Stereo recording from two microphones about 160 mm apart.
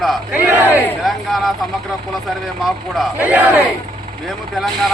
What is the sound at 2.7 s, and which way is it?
Speech, centre (ahead or behind).